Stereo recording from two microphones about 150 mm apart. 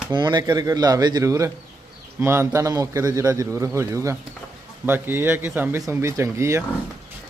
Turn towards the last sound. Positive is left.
turn(degrees=-20)  # may be behind; listen again after turning